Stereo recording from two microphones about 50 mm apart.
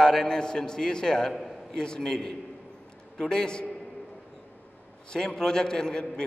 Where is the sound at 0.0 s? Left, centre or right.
Centre.